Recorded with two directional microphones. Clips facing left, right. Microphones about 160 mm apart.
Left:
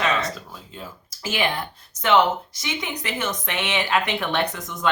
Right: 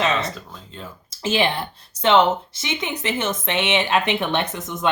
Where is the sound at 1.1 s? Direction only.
25° right (ahead or behind).